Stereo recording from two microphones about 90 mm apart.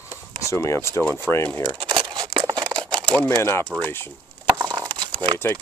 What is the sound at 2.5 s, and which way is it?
Crumpling, 60° right (ahead or behind).